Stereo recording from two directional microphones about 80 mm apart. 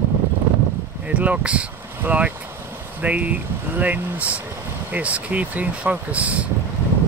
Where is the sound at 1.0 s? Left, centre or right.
Centre.